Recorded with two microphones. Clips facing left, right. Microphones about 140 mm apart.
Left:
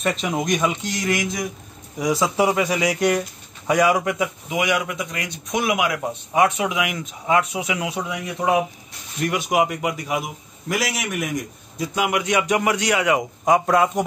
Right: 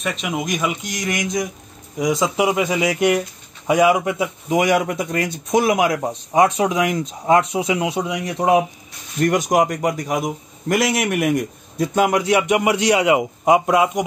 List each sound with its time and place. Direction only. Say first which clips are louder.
0.0 s a man's voice: left 1 dB; centre (ahead or behind); by 4.3 s 25° right (ahead or behind)
4.5 s a man's voice: right 8 dB; 45° right (ahead or behind); by 8.6 s 30° right (ahead or behind)
9.2 s a man's voice: right 4 dB; 45° right (ahead or behind)
10.7 s a man's voice: right 6 dB; centre (ahead or behind)
11.1 s a man's voice: right 7 dB; 60° right (ahead or behind); by 14.0 s 10° right (ahead or behind)